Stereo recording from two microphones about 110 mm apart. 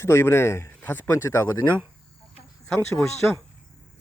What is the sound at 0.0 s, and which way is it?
Speech, 25° left (ahead or behind).